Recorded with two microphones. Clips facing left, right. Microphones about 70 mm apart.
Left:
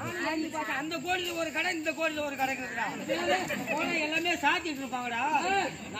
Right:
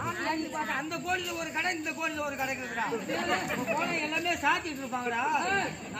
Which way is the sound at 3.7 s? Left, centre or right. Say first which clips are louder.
Even; centre.